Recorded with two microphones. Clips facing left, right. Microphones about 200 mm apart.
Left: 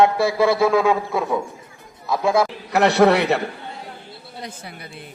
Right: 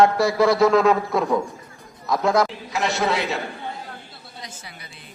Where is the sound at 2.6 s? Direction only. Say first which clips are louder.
Left 8 dB; 65° left (ahead or behind).